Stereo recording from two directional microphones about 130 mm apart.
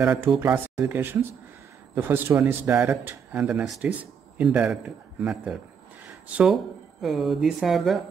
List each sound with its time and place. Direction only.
0.0 s a man's voice: 15° right (ahead or behind)